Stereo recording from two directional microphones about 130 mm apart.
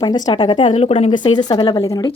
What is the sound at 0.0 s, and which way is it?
Speech, 30° left (ahead or behind).